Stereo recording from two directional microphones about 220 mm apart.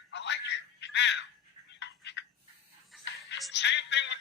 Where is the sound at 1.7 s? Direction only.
55° left (ahead or behind).